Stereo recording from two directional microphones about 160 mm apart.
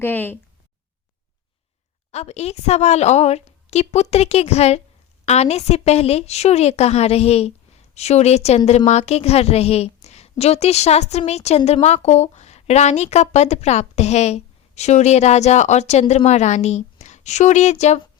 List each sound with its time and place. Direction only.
0.0 s speech: 10° left (ahead or behind)
2.1 s a woman's voice: 45° left (ahead or behind)